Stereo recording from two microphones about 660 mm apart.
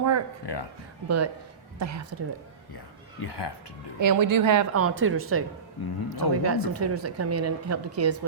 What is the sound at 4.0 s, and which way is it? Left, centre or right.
A woman's voice, right.